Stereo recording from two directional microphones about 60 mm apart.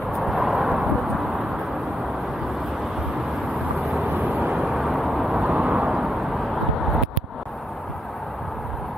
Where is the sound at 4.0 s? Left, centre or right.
Right.